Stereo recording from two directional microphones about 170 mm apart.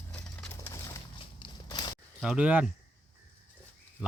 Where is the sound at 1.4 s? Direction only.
30° left (ahead or behind).